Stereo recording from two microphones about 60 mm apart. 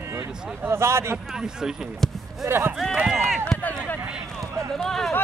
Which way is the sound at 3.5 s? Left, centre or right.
Centre.